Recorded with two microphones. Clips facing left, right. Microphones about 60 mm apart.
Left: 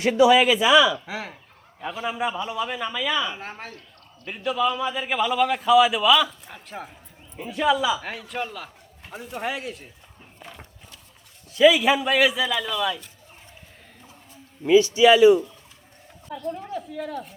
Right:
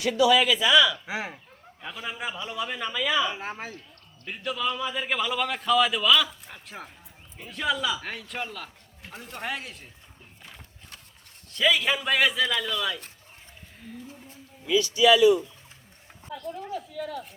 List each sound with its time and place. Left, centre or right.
0.6 s speech: centre
1.0 s speech: centre
1.8 s a man's voice: centre
9.4 s a man's voice: centre
11.5 s a man's voice: centre
14.7 s a man's voice: left